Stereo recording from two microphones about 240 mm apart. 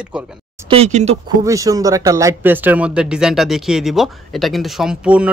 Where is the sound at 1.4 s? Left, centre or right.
Centre.